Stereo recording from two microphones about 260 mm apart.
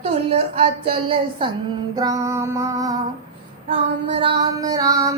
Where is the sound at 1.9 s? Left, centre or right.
Centre.